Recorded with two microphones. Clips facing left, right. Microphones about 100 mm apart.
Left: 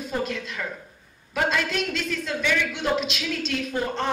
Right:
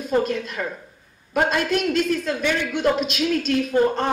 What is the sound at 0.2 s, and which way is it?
A man's voice, 45° right (ahead or behind).